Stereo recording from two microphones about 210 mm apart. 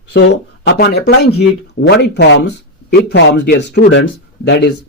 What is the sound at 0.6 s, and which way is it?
Speech, 55° left (ahead or behind).